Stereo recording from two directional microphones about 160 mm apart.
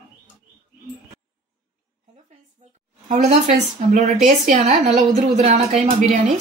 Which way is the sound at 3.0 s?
50° right (ahead or behind).